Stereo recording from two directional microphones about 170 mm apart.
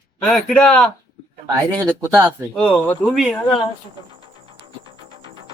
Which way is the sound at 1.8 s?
15° right (ahead or behind).